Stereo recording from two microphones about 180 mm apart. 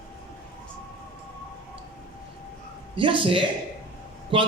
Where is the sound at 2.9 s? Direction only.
30° right (ahead or behind).